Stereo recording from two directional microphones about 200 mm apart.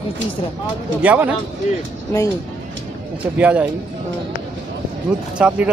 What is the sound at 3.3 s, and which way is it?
Speech, 10° right (ahead or behind).